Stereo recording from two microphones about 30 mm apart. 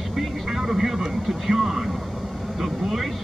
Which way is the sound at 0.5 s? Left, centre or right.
Centre.